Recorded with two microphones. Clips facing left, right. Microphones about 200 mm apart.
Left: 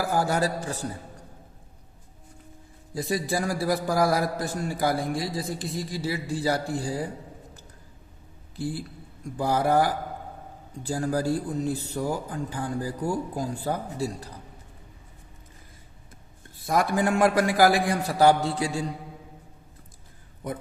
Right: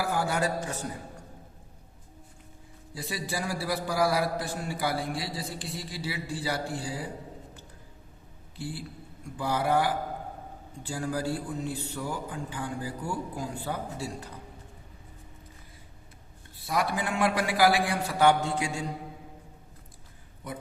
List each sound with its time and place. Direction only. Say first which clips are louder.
0.0 s a sound: left 3 dB; 40° left (ahead or behind)
2.9 s a man's voice: left 7 dB; 45° left (ahead or behind)
8.5 s a man's voice: left 6 dB; 40° left (ahead or behind)
16.6 s a man's voice: left 6 dB; 45° left (ahead or behind)